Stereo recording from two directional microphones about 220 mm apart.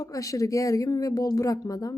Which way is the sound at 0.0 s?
15° left (ahead or behind).